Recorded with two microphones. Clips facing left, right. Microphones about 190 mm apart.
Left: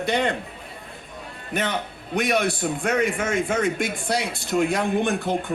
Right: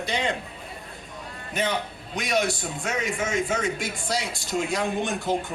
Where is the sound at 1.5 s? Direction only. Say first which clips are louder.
Left 1 dB; 60° left (ahead or behind).